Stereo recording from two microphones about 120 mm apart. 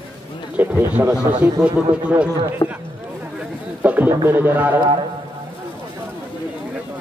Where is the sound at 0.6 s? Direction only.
15° right (ahead or behind).